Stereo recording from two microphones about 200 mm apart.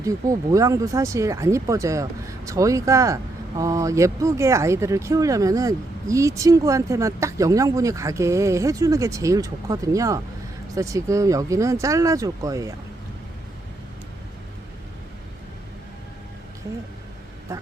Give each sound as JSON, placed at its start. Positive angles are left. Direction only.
{"t": 0.0, "sound": "speech", "side_deg": -15}